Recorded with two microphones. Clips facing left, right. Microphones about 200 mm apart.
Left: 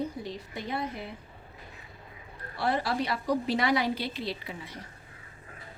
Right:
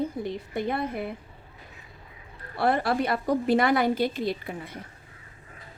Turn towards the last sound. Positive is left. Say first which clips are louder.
# right 5 dB
turn(degrees=-55)  # may be behind; listen again after turning